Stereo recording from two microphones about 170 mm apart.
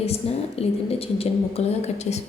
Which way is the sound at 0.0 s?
35° left (ahead or behind).